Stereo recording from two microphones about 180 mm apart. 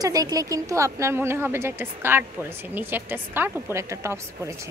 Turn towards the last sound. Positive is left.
turn(degrees=-15)  # may be behind; listen again after turning